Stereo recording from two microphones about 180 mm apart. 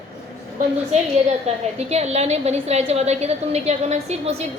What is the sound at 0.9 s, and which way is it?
A woman's voice, 35° right (ahead or behind).